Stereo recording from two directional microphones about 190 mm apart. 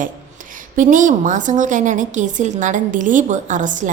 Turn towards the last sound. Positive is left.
turn(degrees=-40)  # may be behind; listen again after turning